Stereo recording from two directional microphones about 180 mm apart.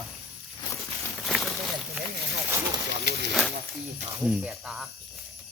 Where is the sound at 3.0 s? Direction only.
65° right (ahead or behind).